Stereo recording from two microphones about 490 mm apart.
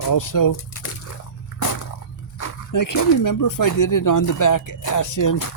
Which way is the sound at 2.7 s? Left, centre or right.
Left.